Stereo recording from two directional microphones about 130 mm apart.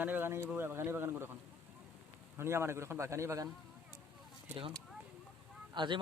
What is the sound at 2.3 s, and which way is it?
A man's voice, 20° right (ahead or behind).